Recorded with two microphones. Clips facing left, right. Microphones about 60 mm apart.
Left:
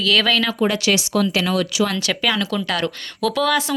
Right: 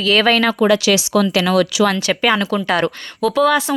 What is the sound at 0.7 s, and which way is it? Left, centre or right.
Speech, right.